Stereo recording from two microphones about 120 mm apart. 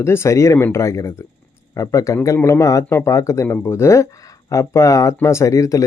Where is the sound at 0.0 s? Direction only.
20° left (ahead or behind).